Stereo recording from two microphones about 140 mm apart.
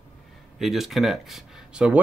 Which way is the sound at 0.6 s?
Centre (ahead or behind).